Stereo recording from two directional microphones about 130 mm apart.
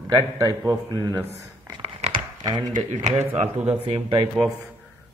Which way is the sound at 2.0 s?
55° right (ahead or behind).